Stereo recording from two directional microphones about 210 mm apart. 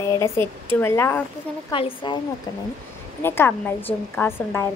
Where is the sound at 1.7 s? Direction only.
25° left (ahead or behind).